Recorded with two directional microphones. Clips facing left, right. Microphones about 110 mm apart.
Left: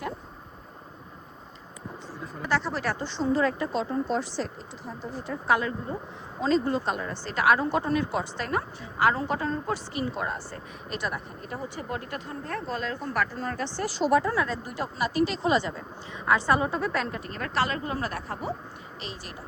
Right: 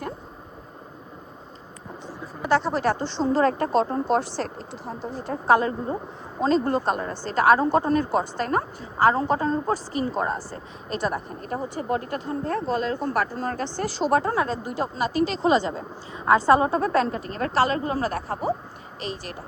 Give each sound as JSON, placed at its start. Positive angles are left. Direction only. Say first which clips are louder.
{"t": 2.4, "sound": "speech", "louder": "right 6 dB", "side_deg": -20}
{"t": 3.4, "sound": "speech", "louder": "right 6 dB", "side_deg": -50}
{"t": 4.9, "sound": "a woman's voice", "louder": "right 4 dB", "side_deg": -40}
{"t": 6.4, "sound": "a woman's voice", "louder": "right 3 dB", "side_deg": -45}